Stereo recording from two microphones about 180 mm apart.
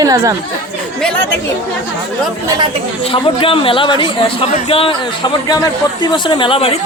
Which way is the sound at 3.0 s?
30° left (ahead or behind).